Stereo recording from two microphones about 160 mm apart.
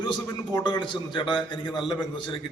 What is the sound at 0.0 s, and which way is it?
A man's voice, 30° left (ahead or behind).